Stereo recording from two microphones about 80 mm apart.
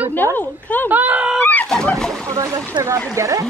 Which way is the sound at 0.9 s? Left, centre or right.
Centre.